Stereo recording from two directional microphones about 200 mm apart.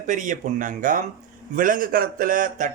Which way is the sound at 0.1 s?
40° right (ahead or behind).